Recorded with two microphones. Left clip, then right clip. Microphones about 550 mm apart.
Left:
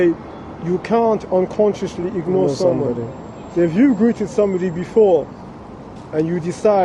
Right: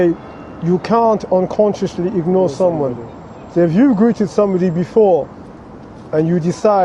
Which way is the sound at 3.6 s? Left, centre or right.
Right.